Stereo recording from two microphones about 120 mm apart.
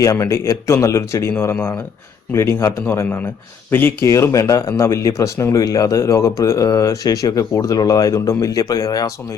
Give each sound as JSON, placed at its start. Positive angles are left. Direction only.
{"t": 0.0, "sound": "speech", "side_deg": 25}
{"t": 2.6, "sound": "speech", "side_deg": 20}